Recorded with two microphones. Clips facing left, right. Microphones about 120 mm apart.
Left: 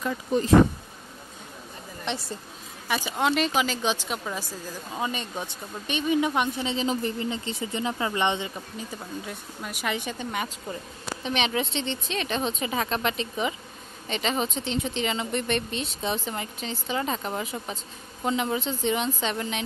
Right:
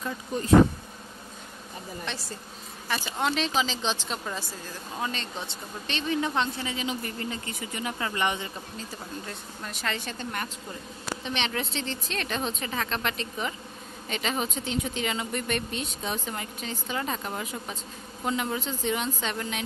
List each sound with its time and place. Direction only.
2.1 s speech: 20° left (ahead or behind)
7.2 s speech: 20° left (ahead or behind)
9.2 s speech: 10° left (ahead or behind)